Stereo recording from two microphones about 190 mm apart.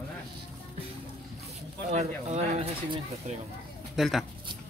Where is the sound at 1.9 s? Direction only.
35° right (ahead or behind).